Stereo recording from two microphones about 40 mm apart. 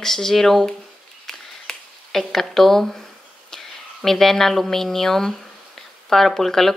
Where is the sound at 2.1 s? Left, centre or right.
Centre.